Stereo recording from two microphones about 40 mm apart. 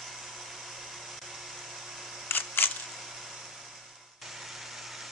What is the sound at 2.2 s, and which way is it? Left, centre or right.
Camera, left.